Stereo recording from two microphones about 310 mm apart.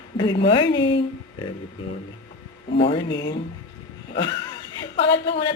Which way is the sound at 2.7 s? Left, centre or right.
Centre.